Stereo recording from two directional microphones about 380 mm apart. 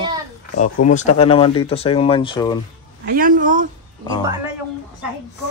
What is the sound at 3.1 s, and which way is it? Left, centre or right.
Speech, right.